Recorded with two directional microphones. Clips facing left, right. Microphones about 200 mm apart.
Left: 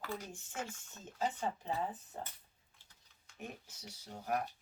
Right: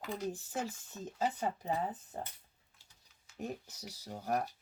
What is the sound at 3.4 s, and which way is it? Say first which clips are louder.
A woman's voice: right 7 dB; 35° right (ahead or behind).